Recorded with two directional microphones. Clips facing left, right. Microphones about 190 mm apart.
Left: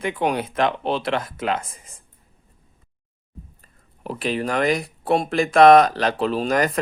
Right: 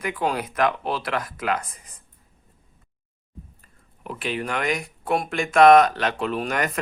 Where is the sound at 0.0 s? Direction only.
25° left (ahead or behind).